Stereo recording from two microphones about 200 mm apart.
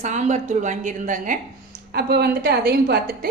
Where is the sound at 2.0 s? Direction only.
55° right (ahead or behind).